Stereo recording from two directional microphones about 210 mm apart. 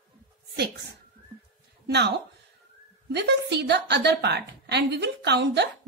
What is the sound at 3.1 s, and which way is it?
A woman's voice, 55° right (ahead or behind).